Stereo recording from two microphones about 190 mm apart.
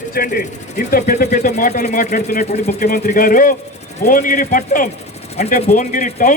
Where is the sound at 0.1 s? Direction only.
50° left (ahead or behind).